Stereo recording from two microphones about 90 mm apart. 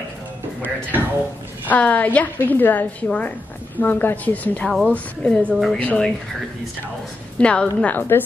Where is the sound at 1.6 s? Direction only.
15° left (ahead or behind); by 5.8 s centre (ahead or behind).